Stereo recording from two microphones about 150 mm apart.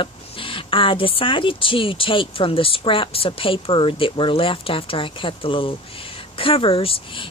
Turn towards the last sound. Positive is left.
turn(degrees=35)  # may be behind; listen again after turning